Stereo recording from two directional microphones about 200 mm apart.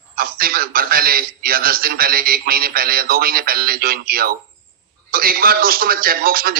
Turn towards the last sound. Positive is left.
turn(degrees=-45)  # may be behind; listen again after turning